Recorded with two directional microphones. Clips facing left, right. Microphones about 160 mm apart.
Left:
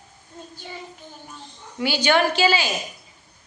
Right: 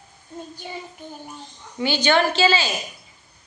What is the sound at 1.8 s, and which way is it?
Speech, 10° left (ahead or behind).